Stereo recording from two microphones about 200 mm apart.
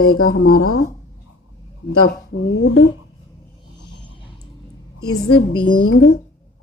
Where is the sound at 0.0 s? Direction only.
90° left.